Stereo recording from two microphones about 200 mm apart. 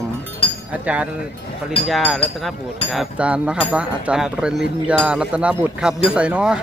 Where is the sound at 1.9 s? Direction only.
Centre (ahead or behind).